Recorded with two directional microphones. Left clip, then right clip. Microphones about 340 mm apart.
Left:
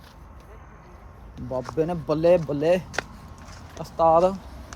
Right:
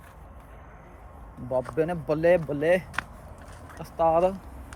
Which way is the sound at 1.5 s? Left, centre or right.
Centre.